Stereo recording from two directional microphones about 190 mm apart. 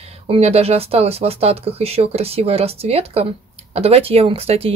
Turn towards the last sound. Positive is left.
turn(degrees=-30)  # may be behind; listen again after turning